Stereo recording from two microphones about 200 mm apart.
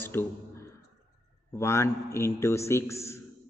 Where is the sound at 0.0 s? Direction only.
10° left (ahead or behind).